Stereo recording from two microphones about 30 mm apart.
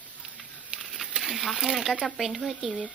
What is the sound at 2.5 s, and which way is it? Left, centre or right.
Speech, centre.